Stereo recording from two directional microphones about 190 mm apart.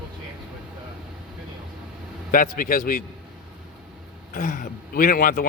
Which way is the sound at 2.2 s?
45° left (ahead or behind).